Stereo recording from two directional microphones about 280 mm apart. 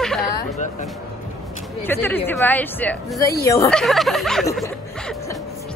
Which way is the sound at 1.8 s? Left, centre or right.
Centre.